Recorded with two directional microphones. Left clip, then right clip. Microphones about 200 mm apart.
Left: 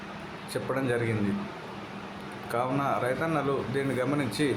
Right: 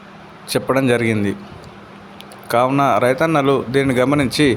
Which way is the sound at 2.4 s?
50° right (ahead or behind).